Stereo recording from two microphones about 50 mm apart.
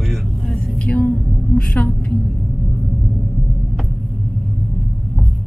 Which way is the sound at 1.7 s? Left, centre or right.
Left.